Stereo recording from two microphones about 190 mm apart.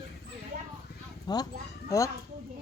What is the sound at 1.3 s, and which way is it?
Speech, 25° left (ahead or behind).